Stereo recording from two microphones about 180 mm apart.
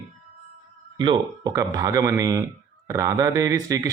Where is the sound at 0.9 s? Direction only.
25° right (ahead or behind).